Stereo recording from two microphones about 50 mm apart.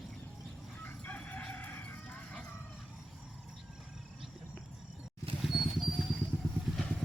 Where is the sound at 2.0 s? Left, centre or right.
Centre.